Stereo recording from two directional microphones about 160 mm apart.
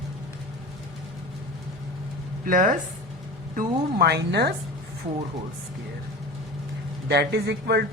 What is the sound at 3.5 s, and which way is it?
A woman's voice, 80° right.